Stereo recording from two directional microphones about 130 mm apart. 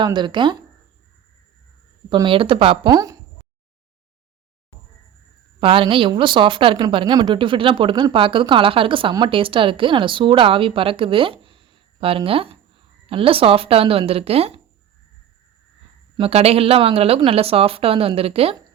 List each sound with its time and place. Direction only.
0.0 s speech: 35° right (ahead or behind)
2.0 s a woman's voice: 40° right (ahead or behind)
2.9 s speech: 25° right (ahead or behind)
5.5 s a woman's voice: 40° right (ahead or behind)
16.1 s a woman's voice: 50° right (ahead or behind)